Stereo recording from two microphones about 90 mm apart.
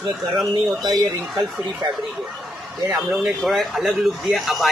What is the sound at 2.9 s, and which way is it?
A man's voice, 5° right (ahead or behind).